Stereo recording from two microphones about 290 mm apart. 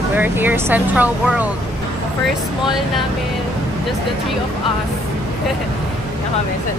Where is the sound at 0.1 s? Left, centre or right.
Centre.